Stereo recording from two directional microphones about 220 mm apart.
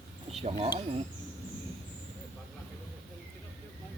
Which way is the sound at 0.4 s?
30° right (ahead or behind).